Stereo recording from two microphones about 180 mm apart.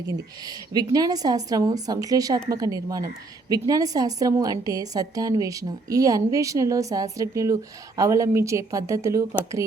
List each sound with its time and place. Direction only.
0.0 s a woman's voice: 20° right (ahead or behind)